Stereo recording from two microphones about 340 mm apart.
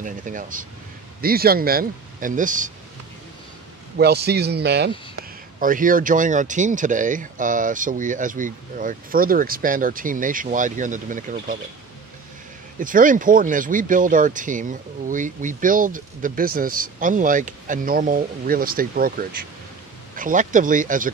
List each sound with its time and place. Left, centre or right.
0.0 s speech: right
4.0 s speech: right
12.7 s speech: right